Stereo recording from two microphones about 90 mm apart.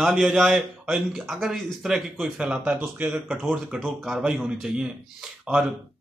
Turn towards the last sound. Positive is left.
turn(degrees=-10)  # may be behind; listen again after turning